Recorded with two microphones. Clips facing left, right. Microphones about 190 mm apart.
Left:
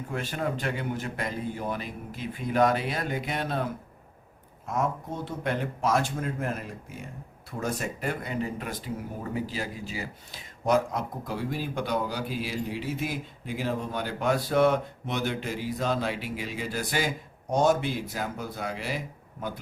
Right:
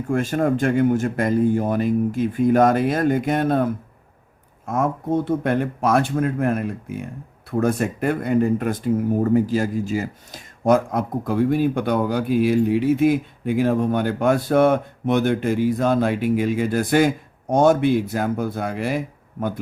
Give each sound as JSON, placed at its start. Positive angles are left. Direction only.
{"t": 0.1, "sound": "speech", "side_deg": -50}